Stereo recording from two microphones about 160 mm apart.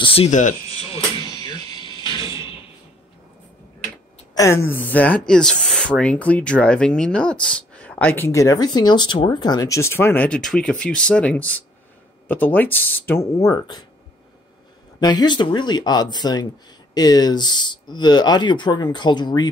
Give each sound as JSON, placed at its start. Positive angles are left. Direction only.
{"t": 0.0, "sound": "speech", "side_deg": 35}
{"t": 0.3, "sound": "speech", "side_deg": 50}
{"t": 1.3, "sound": "music", "side_deg": 30}
{"t": 4.4, "sound": "speech", "side_deg": 15}
{"t": 15.0, "sound": "speech", "side_deg": 25}